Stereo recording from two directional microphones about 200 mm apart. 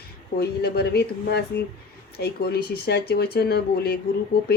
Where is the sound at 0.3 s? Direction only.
50° left (ahead or behind).